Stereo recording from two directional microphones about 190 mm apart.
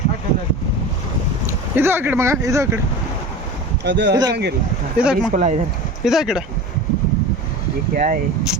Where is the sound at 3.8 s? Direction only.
65° right (ahead or behind).